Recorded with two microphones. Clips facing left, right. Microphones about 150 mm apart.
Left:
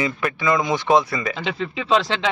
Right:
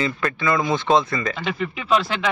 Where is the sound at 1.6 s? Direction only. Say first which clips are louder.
Left 1 dB; 25° left (ahead or behind).